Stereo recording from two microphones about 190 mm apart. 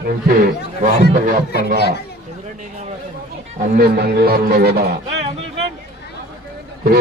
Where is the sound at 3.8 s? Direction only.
55° right (ahead or behind).